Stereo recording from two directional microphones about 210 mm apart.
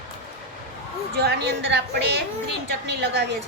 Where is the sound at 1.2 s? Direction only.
55° right (ahead or behind).